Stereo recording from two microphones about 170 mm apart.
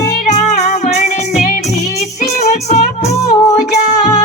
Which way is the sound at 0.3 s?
45° left (ahead or behind).